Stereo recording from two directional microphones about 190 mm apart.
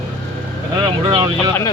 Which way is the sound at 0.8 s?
25° right (ahead or behind).